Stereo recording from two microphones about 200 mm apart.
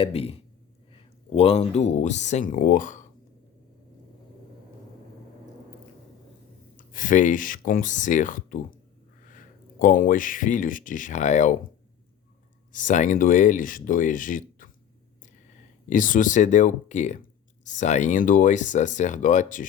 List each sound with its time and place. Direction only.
0.0 s speech: 30° left (ahead or behind)
6.7 s speech: 40° left (ahead or behind)
12.7 s speech: 40° left (ahead or behind)
15.9 s speech: 40° left (ahead or behind)